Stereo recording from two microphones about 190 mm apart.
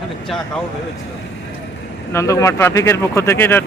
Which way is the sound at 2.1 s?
15° left (ahead or behind).